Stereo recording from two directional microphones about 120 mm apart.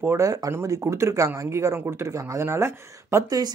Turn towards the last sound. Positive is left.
turn(degrees=-30)  # may be behind; listen again after turning